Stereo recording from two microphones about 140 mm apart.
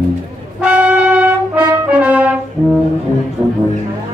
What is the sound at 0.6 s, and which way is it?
Brass instrument, 10° right (ahead or behind).